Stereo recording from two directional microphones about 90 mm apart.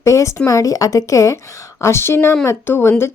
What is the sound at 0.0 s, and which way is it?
Speech, 35° left (ahead or behind).